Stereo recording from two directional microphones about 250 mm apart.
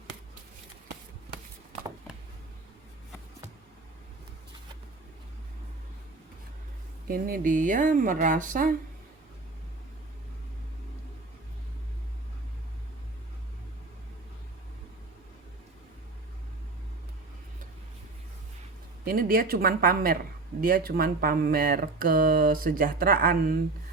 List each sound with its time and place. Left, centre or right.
7.1 s speech: right
19.0 s speech: right